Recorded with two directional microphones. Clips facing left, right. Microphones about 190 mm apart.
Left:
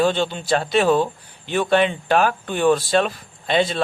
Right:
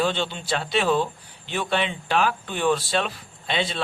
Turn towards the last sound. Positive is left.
turn(degrees=45)  # may be behind; listen again after turning